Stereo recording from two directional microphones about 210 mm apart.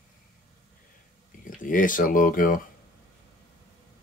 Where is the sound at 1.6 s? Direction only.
40° left (ahead or behind).